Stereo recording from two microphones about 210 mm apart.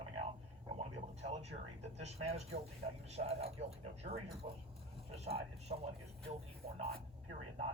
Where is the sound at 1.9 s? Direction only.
30° right (ahead or behind).